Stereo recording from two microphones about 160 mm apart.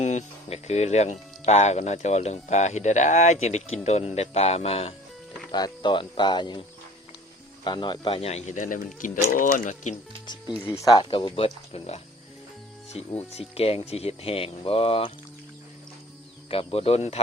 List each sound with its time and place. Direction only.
0.0 s speech: 45° left (ahead or behind)
5.5 s speech: 25° left (ahead or behind)
7.6 s speech: 30° left (ahead or behind); by 9.9 s 55° left (ahead or behind)
10.2 s speech: 25° left (ahead or behind)
13.3 s speech: 40° left (ahead or behind)
16.5 s speech: 35° left (ahead or behind)